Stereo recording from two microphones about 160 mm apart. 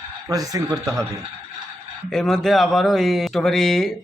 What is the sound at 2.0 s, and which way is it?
Speech, centre (ahead or behind).